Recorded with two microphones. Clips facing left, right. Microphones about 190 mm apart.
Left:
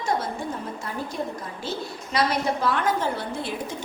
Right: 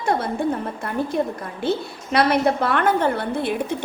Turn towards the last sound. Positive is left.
turn(degrees=-60)  # may be behind; listen again after turning